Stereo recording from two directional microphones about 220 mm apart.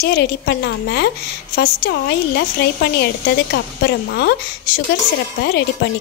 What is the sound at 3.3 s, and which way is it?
A woman's voice, 50° left (ahead or behind).